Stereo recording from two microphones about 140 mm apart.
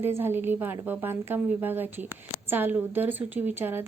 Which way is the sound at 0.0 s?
15° right (ahead or behind).